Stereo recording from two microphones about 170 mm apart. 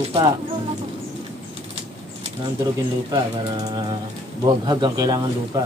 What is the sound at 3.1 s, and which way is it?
Speech, 25° right (ahead or behind).